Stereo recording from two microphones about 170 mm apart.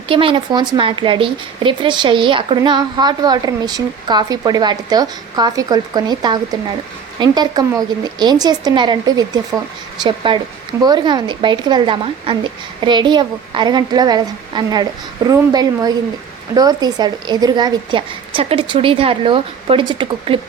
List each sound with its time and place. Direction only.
0.1 s speech: 30° right (ahead or behind)